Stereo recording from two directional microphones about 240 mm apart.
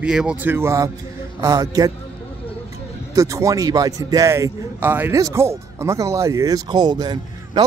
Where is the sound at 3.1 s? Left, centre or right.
Centre.